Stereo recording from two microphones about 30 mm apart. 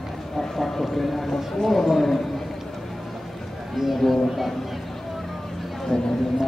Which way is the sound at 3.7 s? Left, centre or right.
Centre.